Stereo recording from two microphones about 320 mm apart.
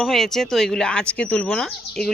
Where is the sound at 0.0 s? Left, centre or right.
Centre.